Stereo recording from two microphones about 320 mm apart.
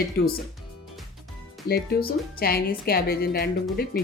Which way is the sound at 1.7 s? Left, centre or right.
Left.